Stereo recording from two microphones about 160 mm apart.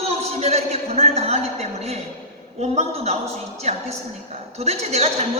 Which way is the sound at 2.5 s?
40° right (ahead or behind).